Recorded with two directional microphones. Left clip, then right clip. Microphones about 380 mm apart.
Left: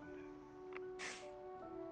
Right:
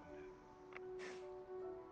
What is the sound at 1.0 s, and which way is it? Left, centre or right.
Music, left.